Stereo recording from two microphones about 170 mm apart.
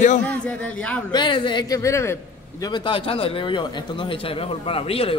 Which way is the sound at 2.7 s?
30° left (ahead or behind).